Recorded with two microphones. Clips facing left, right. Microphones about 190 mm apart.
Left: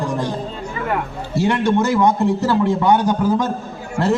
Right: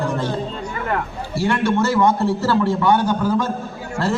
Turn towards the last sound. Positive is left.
turn(degrees=20)  # may be behind; listen again after turning